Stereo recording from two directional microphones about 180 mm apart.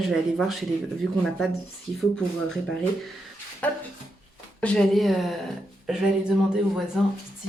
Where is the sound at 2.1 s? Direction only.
5° left (ahead or behind).